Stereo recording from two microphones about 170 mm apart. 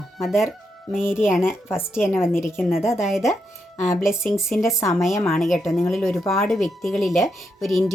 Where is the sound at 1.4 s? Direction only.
15° left (ahead or behind).